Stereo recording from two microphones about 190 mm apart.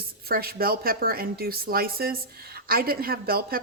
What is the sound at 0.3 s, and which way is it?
A woman's voice, 50° right (ahead or behind).